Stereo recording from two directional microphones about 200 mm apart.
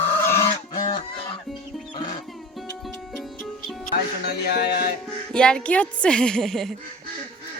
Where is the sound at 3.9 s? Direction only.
55° left (ahead or behind).